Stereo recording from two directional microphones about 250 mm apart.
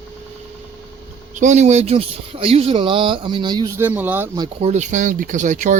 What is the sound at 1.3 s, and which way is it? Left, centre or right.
Speech, right.